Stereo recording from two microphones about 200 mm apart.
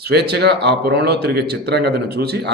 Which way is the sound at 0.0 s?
55° right (ahead or behind).